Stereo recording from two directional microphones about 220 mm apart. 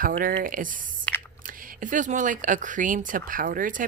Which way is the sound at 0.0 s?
40° right (ahead or behind).